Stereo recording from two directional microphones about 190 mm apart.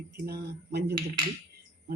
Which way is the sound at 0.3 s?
60° right (ahead or behind).